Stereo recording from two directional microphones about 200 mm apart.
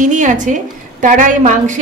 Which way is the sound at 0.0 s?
40° right (ahead or behind).